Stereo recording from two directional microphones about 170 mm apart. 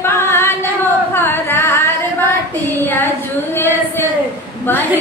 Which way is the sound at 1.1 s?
15° left (ahead or behind).